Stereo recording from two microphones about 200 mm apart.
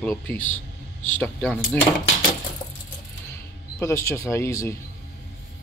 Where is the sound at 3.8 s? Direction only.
15° left (ahead or behind).